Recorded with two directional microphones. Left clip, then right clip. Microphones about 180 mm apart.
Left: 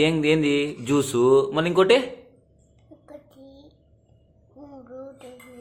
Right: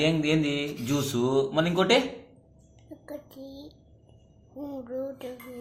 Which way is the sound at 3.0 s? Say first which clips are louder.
Right 4 dB; 20° right (ahead or behind).